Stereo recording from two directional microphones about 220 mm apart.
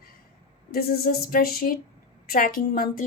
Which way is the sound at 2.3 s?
40° left (ahead or behind).